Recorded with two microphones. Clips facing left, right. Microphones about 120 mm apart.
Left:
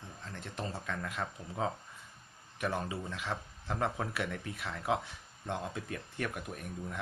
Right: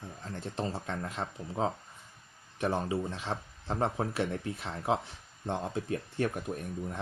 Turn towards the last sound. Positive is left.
turn(degrees=-30)  # may be behind; listen again after turning